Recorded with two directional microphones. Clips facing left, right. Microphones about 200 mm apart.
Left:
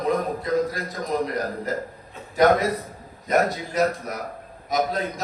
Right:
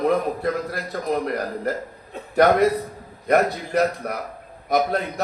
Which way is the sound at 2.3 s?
60° right (ahead or behind).